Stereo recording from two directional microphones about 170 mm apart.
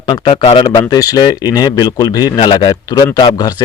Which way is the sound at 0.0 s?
30° left (ahead or behind).